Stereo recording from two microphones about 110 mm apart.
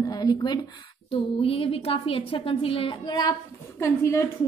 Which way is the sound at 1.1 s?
55° left (ahead or behind).